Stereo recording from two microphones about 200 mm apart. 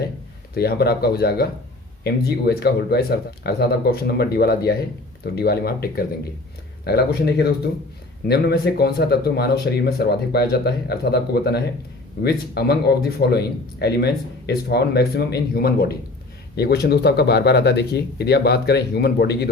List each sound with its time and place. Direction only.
0.5 s speech: 50° left (ahead or behind)